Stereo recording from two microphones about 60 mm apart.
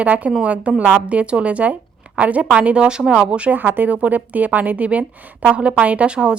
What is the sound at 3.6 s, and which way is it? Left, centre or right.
A woman's voice, right.